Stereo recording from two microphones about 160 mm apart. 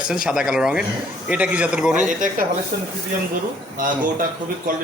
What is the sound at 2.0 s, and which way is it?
Speech, 55° right (ahead or behind).